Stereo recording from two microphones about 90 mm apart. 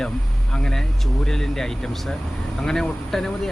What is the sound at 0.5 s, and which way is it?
Speech, 5° left (ahead or behind).